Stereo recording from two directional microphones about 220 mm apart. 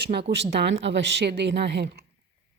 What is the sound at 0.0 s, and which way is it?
A woman's voice, 45° right (ahead or behind).